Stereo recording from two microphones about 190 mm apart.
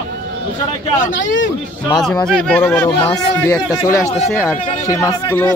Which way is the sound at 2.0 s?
5° left (ahead or behind).